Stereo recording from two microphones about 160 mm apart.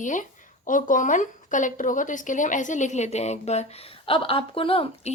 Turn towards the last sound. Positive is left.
turn(degrees=35)  # may be behind; listen again after turning